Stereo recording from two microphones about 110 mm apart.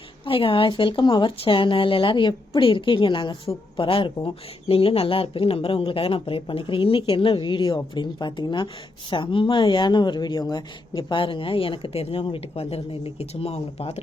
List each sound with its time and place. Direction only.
0.3 s a woman's voice: 55° left (ahead or behind); by 14.0 s 75° left (ahead or behind)